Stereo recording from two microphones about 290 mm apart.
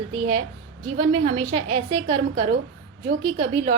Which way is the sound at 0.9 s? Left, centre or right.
Right.